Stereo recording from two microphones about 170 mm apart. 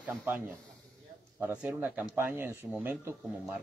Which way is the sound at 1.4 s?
5° right (ahead or behind).